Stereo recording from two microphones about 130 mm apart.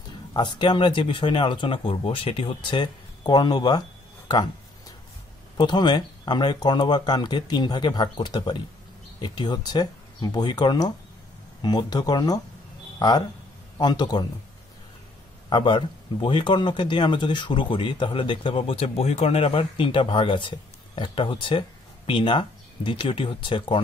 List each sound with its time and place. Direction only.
0.3 s speech: 35° left (ahead or behind)
4.3 s a sound: 35° left (ahead or behind)
5.6 s speech: 35° left (ahead or behind)
13.7 s speech: 35° left (ahead or behind)
15.5 s speech: 40° left (ahead or behind)